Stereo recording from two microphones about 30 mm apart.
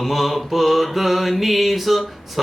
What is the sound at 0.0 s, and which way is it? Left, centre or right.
Mantra, centre.